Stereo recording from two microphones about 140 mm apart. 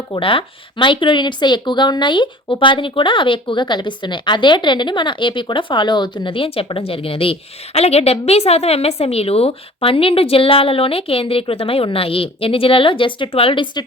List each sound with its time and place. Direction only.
0.1 s speech: 40° left (ahead or behind)